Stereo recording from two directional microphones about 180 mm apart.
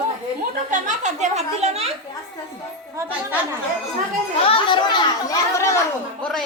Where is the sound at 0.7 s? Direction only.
40° right (ahead or behind).